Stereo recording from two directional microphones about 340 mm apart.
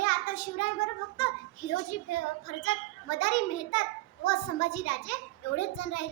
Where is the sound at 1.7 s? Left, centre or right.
Left.